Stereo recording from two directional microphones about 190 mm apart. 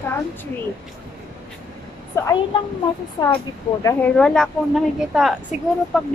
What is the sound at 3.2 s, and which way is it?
Speech, 20° left (ahead or behind).